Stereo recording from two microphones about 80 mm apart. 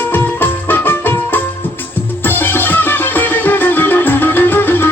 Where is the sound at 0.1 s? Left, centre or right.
Left.